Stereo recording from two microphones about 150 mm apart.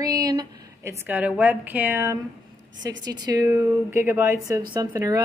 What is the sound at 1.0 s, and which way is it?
A woman's voice, 10° right (ahead or behind).